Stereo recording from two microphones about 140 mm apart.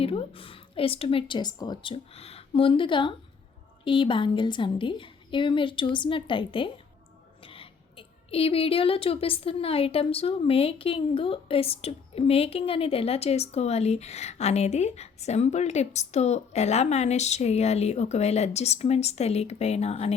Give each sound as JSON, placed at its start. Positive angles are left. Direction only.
{"t": 0.0, "sound": "a woman's voice", "side_deg": 40}